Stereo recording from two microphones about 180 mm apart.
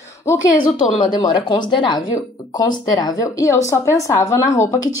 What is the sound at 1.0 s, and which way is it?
A woman's voice, 25° left (ahead or behind).